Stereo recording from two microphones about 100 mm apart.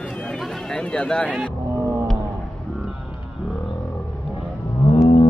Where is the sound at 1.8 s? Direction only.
30° right (ahead or behind).